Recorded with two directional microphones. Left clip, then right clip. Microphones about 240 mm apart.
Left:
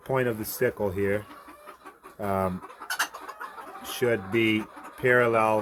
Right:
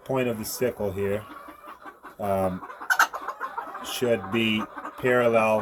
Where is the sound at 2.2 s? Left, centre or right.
Centre.